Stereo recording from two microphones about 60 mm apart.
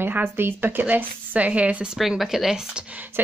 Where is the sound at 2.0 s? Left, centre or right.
Centre.